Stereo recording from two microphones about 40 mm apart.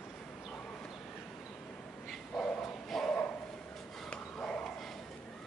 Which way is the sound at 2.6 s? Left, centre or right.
Centre.